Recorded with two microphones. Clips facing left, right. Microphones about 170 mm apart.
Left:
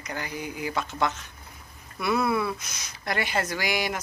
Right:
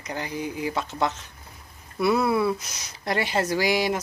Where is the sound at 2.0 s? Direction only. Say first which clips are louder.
Right 4 dB; 30° right (ahead or behind).